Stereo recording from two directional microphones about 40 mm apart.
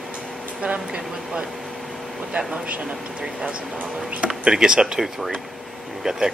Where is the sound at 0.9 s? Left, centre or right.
Right.